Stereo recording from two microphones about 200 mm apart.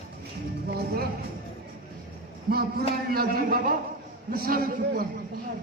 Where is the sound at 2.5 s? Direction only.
50° right (ahead or behind).